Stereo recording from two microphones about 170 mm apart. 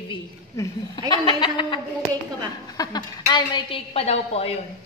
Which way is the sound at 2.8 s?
25° left (ahead or behind).